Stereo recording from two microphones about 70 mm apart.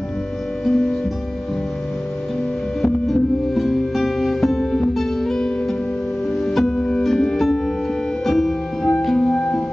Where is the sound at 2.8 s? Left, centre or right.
Centre.